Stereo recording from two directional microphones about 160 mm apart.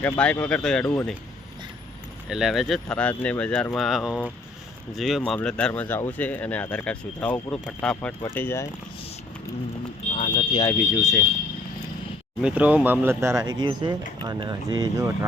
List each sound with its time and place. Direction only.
0.0 s speech: 10° left (ahead or behind)
2.3 s speech: centre (ahead or behind); by 8.6 s 15° left (ahead or behind)
10.1 s smoke detector: 50° left (ahead or behind)
10.8 s speech: centre (ahead or behind)
12.4 s speech: 10° right (ahead or behind)